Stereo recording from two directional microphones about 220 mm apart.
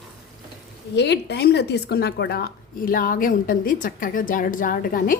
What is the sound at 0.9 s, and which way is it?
A woman's voice, 50° left (ahead or behind).